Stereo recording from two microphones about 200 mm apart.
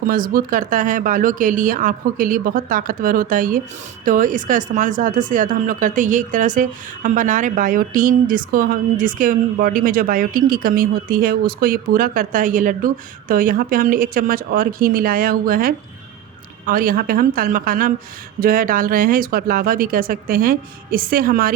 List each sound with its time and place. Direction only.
0.0 s speech: 45° right (ahead or behind)